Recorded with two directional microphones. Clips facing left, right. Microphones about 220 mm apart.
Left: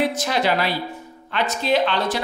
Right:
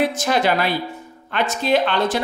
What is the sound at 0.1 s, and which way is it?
Speech, 50° right (ahead or behind).